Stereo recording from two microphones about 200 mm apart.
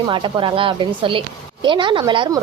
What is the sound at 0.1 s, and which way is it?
Speech, 25° right (ahead or behind).